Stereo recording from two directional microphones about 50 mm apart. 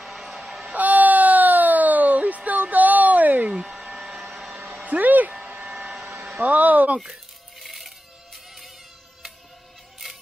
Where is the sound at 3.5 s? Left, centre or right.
Centre.